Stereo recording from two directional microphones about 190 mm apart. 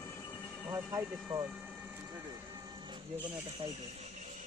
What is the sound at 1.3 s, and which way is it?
Vehicle, 10° right (ahead or behind).